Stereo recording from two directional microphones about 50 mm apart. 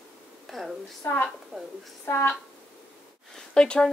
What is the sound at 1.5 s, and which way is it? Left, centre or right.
Speech, centre.